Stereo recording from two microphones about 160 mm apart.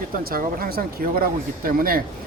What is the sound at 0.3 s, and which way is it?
A man's voice, 65° right (ahead or behind).